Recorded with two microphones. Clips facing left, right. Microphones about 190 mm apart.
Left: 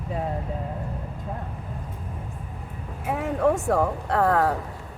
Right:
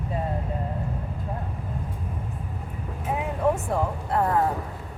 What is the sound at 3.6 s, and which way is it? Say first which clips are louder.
Speech: left 4 dB; 90° left.